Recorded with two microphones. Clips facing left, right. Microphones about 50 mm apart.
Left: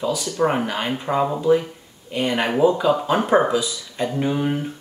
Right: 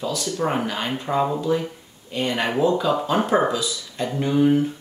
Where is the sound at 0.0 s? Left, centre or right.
Centre.